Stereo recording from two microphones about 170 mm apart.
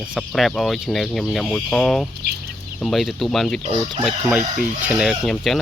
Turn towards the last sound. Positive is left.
turn(degrees=0)  # may be behind; listen again after turning